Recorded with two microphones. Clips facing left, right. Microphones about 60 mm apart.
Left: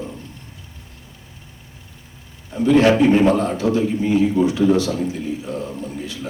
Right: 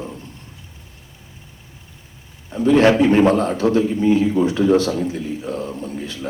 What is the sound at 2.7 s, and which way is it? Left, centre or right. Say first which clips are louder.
A man's voice: even; right.